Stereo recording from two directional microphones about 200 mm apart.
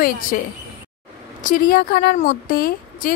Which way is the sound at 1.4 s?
40° left (ahead or behind).